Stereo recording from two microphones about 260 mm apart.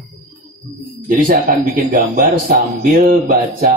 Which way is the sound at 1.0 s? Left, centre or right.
Right.